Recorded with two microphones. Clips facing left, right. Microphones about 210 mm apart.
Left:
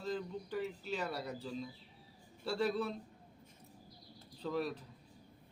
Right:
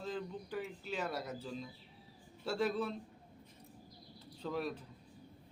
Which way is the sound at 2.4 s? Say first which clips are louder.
Even; centre (ahead or behind).